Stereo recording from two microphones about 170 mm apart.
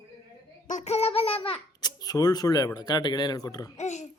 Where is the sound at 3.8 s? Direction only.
45° left (ahead or behind).